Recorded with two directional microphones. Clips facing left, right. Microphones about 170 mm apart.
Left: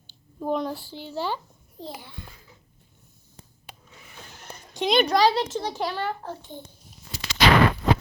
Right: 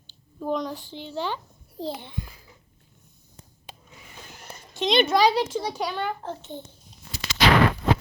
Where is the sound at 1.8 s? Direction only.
30° right (ahead or behind).